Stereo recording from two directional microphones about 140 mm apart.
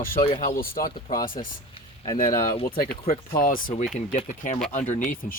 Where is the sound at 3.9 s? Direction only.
65° left (ahead or behind).